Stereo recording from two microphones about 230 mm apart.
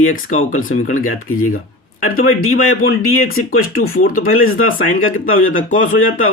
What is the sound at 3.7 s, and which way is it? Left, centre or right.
Speech, left.